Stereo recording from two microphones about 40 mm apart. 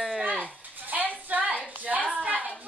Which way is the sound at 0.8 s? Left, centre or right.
Right.